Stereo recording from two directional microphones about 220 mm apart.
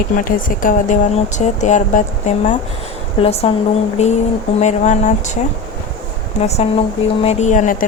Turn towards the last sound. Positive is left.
turn(degrees=35)  # may be behind; listen again after turning